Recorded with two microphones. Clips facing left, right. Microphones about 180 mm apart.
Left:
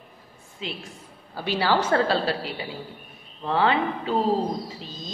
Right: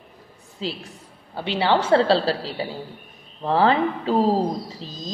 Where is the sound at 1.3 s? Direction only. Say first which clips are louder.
Right 2 dB; 20° right (ahead or behind).